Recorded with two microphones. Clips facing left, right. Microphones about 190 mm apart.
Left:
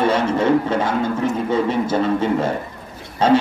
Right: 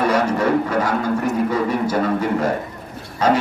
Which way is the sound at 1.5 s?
25° left (ahead or behind).